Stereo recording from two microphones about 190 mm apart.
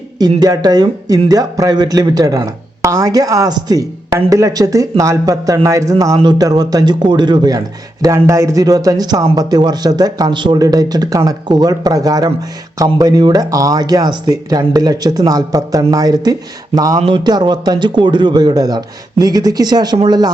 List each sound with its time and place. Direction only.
0.2 s speech: 20° right (ahead or behind)